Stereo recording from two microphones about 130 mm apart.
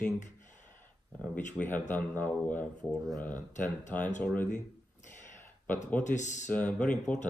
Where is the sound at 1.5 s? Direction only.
10° left (ahead or behind).